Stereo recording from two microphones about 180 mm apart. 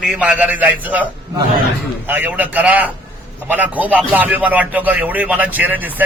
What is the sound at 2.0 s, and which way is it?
Speech, 10° right (ahead or behind).